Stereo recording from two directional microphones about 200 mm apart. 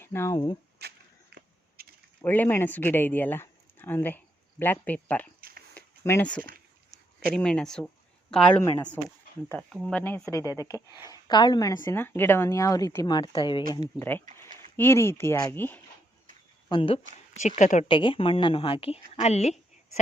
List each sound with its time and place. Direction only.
0.0 s speech: 10° left (ahead or behind)
0.8 s a sound: 55° right (ahead or behind)
2.2 s a woman's voice: 10° left (ahead or behind)
5.4 s a sound: 50° right (ahead or behind)
5.7 s a sound: 10° left (ahead or behind)
7.3 s a woman's voice: 5° left (ahead or behind)
10.6 s speech: 15° right (ahead or behind)
11.1 s a woman's voice: 20° left (ahead or behind)
16.6 s a woman's voice: 25° left (ahead or behind)
17.4 s a woman's voice: 35° left (ahead or behind)
17.9 s a woman's voice: 25° left (ahead or behind)